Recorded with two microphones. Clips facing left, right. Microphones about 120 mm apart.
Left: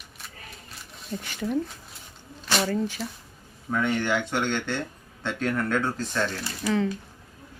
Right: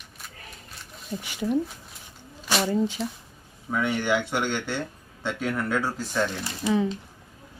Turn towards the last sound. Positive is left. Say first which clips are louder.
# right 1 dB
turn(degrees=-20)  # may be behind; listen again after turning